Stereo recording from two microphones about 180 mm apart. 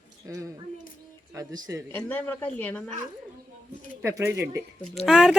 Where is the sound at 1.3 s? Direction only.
20° right (ahead or behind).